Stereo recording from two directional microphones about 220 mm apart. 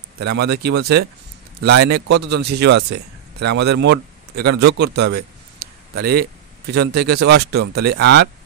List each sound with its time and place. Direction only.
0.4 s a man's voice: 50° right (ahead or behind)